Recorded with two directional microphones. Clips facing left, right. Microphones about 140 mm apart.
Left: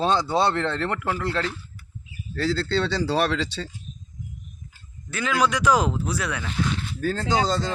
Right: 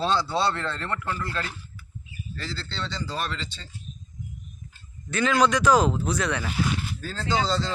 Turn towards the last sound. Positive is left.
turn(degrees=50)  # may be behind; listen again after turning